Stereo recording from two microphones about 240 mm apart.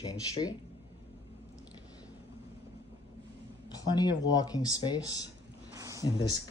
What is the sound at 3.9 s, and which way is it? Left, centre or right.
Speech, centre.